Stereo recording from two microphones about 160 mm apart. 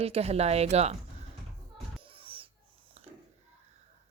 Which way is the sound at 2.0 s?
35° right (ahead or behind).